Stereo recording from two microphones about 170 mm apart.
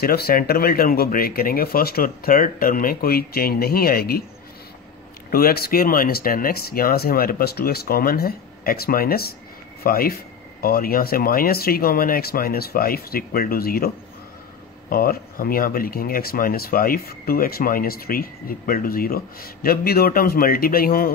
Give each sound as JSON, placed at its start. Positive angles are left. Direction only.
{"t": 0.0, "sound": "speech", "side_deg": 65}
{"t": 5.3, "sound": "speech", "side_deg": 65}